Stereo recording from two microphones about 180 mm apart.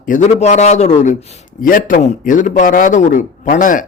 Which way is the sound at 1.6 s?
50° left (ahead or behind).